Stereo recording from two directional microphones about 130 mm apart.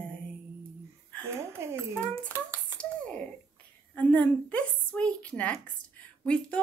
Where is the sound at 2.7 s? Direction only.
10° left (ahead or behind).